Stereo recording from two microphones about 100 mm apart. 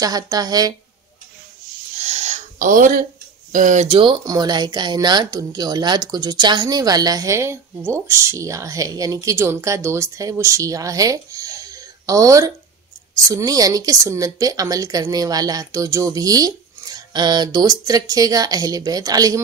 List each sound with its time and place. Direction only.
0.0 s speech: 40° right (ahead or behind)
3.9 s speech: 60° right (ahead or behind)
4.3 s speech: 45° right (ahead or behind)